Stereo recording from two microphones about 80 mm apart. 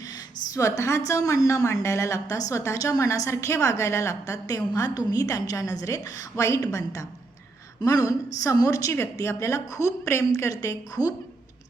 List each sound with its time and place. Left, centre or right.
0.1 s a woman's voice: left
7.8 s a woman's voice: left